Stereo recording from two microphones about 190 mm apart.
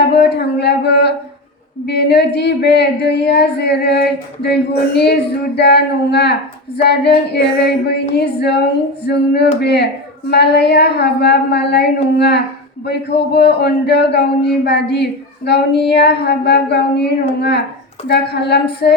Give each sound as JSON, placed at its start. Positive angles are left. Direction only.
{"t": 0.1, "sound": "a sound", "side_deg": 60}
{"t": 1.9, "sound": "speech", "side_deg": 60}
{"t": 18.1, "sound": "speech", "side_deg": 60}